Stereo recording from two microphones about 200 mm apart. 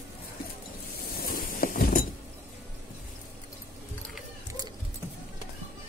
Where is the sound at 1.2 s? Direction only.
45° left (ahead or behind).